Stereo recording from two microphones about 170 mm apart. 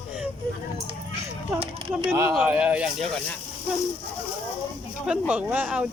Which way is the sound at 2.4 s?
10° right (ahead or behind).